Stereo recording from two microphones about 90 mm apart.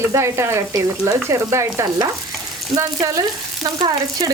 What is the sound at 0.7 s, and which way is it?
Speech, 40° right (ahead or behind).